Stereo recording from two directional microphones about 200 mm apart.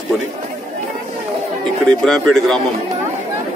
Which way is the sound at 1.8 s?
5° left (ahead or behind).